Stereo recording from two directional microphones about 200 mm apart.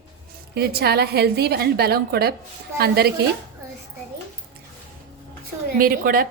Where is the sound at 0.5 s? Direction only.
50° right (ahead or behind).